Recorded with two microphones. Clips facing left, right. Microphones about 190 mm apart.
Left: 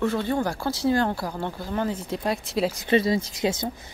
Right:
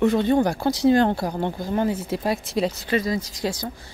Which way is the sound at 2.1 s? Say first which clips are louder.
Right 2 dB; 5° right (ahead or behind).